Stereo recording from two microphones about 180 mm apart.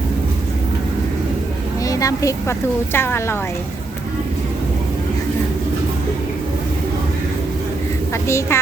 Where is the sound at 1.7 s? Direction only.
20° left (ahead or behind).